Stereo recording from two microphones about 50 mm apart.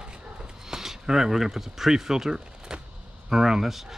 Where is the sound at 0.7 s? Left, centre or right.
Centre.